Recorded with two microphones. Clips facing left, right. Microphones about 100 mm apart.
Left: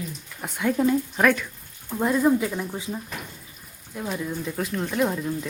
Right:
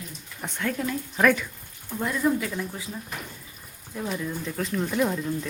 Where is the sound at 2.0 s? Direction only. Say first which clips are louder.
Left 4 dB; 25° left (ahead or behind).